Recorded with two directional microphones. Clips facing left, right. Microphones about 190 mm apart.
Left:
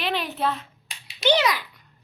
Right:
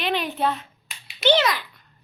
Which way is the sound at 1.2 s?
10° left (ahead or behind).